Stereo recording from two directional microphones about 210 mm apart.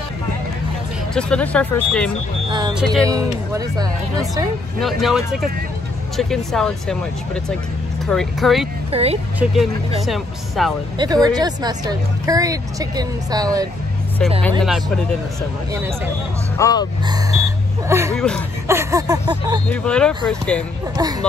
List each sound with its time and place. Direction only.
1.1 s speech: 5° left (ahead or behind)
3.1 s speech: 15° right (ahead or behind)
4.7 s speech: centre (ahead or behind)
8.1 s speech: centre (ahead or behind)
8.9 s speech: 30° right (ahead or behind)
9.4 s speech: centre (ahead or behind)
11.0 s speech: 20° right (ahead or behind)
16.5 s speech: 15° left (ahead or behind)
17.1 s speech: 15° right (ahead or behind)
18.1 s speech: 5° left (ahead or behind)
18.7 s speech: 15° right (ahead or behind)
19.7 s speech: 5° left (ahead or behind)
20.9 s speech: 20° right (ahead or behind)